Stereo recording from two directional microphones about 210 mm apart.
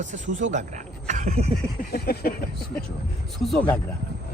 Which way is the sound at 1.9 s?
50° left (ahead or behind).